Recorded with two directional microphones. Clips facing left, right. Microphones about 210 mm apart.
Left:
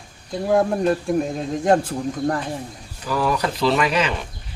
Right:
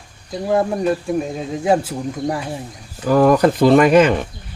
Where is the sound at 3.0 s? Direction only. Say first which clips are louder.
Right 9 dB; 50° right (ahead or behind).